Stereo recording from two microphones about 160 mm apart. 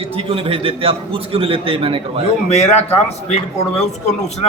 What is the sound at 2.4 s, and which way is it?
Speech, 45° left (ahead or behind).